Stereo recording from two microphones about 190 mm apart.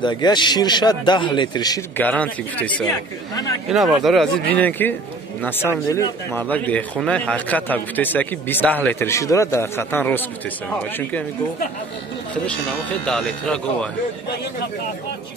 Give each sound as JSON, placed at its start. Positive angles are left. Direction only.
{"t": 0.0, "sound": "a man's voice", "side_deg": 20}
{"t": 2.0, "sound": "speech", "side_deg": 10}
{"t": 13.0, "sound": "speech", "side_deg": 5}